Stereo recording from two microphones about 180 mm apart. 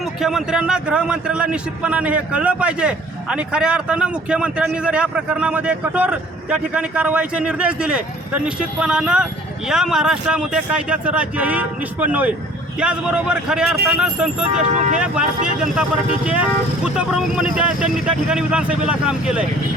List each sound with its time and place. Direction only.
0.2 s a man's voice: centre (ahead or behind)
14.5 s speech: 40° right (ahead or behind)
14.9 s a man's voice: 5° right (ahead or behind)